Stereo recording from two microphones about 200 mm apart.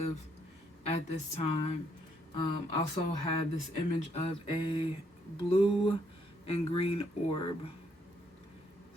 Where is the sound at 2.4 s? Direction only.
20° left (ahead or behind).